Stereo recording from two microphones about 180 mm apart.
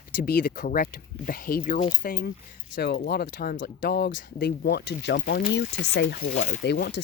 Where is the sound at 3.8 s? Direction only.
60° left (ahead or behind).